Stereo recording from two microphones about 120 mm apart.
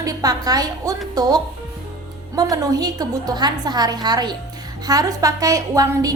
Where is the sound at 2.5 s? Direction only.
30° right (ahead or behind).